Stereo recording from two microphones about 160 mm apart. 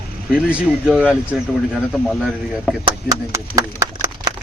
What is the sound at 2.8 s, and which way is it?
Speech, 20° right (ahead or behind).